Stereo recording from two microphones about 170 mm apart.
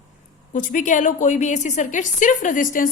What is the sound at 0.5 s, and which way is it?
A woman's voice, 50° left (ahead or behind).